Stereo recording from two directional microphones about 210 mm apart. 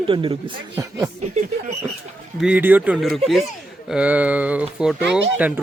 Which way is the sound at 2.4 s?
5° right (ahead or behind).